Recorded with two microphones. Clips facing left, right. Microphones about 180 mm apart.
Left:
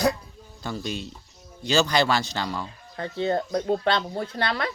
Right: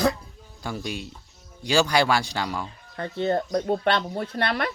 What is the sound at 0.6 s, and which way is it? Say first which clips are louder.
Speech: even; 10° right (ahead or behind).